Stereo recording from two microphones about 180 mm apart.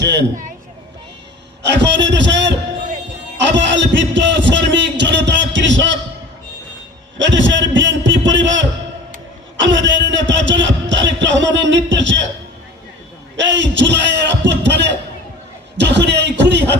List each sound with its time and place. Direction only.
0.0 s a man's voice: 70° right (ahead or behind)
1.6 s a man's voice: 75° right (ahead or behind)
3.6 s a man's voice: 90° right
7.2 s a man's voice: 90° right
9.6 s music: 90° right
13.3 s a sound: 85° right